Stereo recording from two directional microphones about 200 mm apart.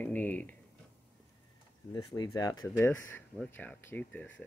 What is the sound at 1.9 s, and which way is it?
Speech, 20° left (ahead or behind).